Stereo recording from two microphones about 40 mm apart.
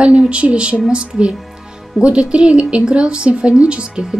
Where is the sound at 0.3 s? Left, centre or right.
Right.